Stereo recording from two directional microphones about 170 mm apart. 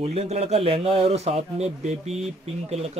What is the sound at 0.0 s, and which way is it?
A man's voice, 40° right (ahead or behind).